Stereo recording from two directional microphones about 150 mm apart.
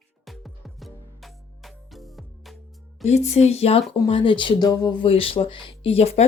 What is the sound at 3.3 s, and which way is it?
Speech, 45° left (ahead or behind).